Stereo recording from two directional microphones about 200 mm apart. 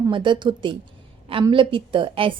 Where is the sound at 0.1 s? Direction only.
25° right (ahead or behind).